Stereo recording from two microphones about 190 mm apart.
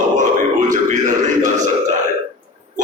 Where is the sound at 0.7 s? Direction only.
40° right (ahead or behind).